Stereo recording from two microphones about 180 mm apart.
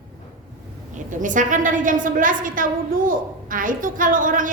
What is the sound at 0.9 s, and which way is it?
A woman's voice, 45° right (ahead or behind).